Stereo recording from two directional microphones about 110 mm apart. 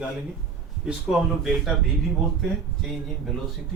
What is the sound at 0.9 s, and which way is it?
Speech, 5° right (ahead or behind).